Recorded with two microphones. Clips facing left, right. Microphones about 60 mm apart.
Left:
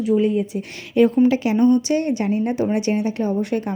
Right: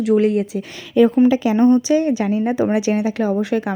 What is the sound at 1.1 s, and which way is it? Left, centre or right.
Speech, right.